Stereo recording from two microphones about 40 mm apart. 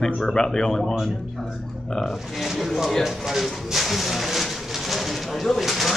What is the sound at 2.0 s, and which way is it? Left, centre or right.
Speech, centre.